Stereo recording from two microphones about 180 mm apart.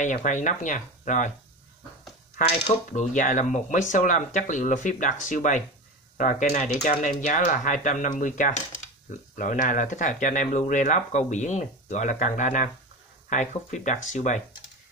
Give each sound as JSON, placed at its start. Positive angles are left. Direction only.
{"t": 0.0, "sound": "speech", "side_deg": 45}
{"t": 2.6, "sound": "speech", "side_deg": 40}